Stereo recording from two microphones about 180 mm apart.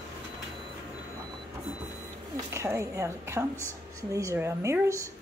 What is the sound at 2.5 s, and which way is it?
A woman's voice, 15° right (ahead or behind).